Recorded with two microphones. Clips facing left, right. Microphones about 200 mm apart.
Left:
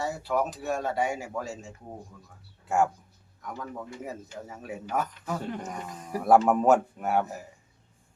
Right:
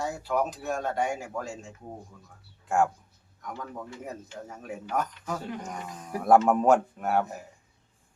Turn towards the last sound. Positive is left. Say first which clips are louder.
# even
turn(degrees=5)  # may be behind; listen again after turning